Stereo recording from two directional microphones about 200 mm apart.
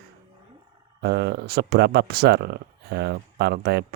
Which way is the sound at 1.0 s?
55° right (ahead or behind).